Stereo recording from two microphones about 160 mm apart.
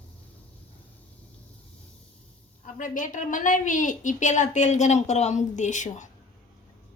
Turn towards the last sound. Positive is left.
turn(degrees=50)  # may be behind; listen again after turning